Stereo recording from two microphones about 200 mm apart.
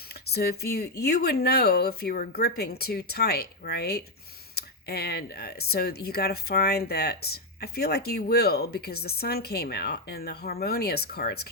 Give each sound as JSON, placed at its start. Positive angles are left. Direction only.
{"t": 0.1, "sound": "speech", "side_deg": 50}